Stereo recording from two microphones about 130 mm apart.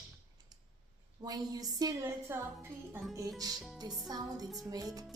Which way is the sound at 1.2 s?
30° right (ahead or behind).